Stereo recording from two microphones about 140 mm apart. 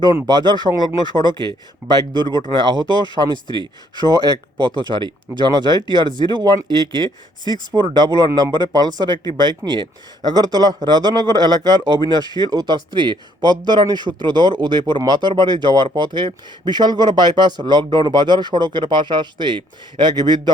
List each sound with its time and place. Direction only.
0.3 s speech: 30° right (ahead or behind)